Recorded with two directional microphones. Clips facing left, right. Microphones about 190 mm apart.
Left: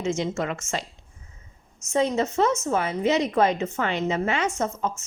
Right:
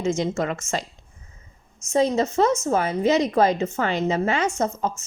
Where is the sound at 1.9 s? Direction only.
35° right (ahead or behind).